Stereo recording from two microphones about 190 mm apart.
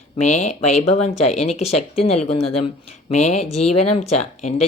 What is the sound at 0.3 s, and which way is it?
Speech, 35° left (ahead or behind).